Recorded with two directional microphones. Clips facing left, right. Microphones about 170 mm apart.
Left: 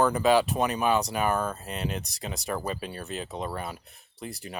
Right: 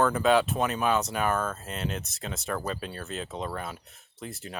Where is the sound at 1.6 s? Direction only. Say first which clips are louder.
Left 1 dB; centre (ahead or behind).